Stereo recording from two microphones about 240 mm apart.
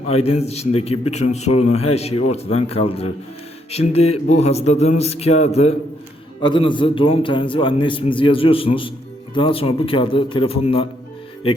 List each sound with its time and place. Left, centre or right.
0.2 s a man's voice: left